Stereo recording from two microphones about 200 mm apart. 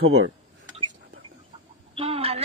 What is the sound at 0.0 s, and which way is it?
Speech, 80° right.